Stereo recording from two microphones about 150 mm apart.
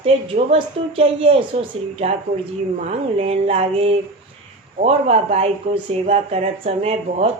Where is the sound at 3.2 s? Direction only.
40° right (ahead or behind).